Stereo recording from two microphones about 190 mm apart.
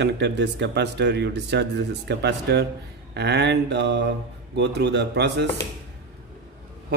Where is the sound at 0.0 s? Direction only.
65° right (ahead or behind).